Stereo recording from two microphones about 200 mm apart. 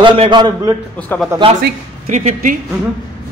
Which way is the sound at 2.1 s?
35° right (ahead or behind).